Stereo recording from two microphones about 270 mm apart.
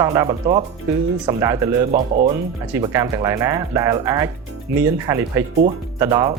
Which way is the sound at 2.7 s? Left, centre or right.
Centre.